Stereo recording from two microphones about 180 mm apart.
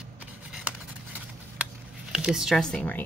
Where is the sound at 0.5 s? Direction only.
5° right (ahead or behind).